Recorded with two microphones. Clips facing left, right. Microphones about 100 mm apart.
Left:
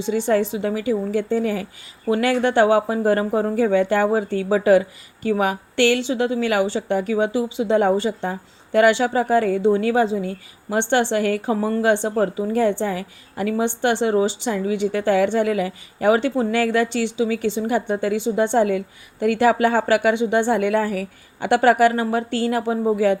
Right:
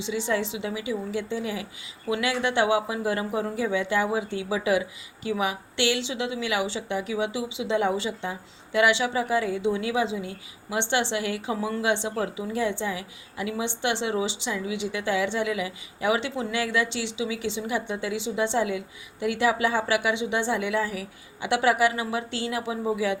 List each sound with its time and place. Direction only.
0.0 s a woman's voice: 50° left (ahead or behind)